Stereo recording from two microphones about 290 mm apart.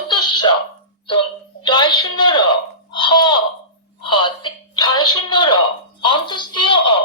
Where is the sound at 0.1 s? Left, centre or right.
Centre.